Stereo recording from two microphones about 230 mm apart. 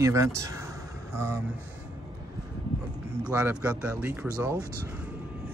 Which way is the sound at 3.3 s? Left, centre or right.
Centre.